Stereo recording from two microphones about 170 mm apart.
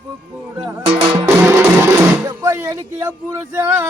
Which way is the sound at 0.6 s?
15° right (ahead or behind).